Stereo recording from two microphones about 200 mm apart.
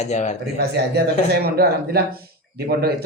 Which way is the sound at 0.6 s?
55° right (ahead or behind).